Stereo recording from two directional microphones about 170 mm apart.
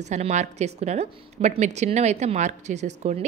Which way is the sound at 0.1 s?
45° right (ahead or behind).